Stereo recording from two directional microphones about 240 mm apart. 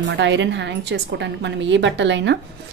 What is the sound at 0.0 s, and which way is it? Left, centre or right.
A woman's voice, right.